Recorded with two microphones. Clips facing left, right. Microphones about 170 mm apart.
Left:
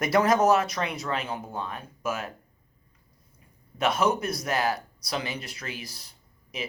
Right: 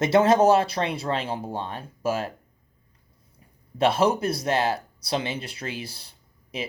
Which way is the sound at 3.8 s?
30° right (ahead or behind).